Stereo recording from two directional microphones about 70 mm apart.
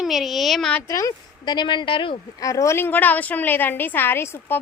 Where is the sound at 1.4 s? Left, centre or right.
Left.